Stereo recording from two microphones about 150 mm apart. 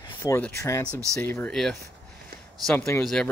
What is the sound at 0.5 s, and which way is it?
Speech, 20° left (ahead or behind).